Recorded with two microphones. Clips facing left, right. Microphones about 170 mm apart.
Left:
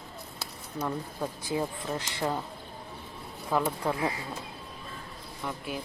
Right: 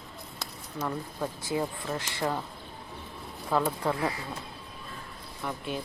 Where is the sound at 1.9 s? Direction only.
20° left (ahead or behind).